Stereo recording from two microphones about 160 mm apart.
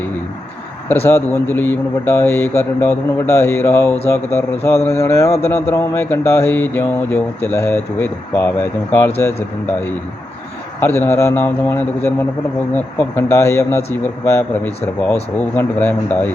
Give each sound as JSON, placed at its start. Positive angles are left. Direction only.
{"t": 1.0, "sound": "a man's voice", "side_deg": 15}
{"t": 10.8, "sound": "a man's voice", "side_deg": 15}